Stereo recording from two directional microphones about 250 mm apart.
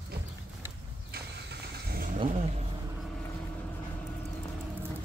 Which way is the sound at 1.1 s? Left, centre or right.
Right.